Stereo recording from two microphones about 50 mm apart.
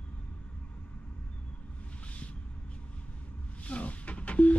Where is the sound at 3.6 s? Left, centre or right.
Left.